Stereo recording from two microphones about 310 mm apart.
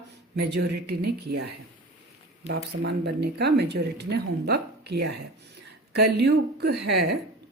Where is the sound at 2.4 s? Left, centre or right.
Right.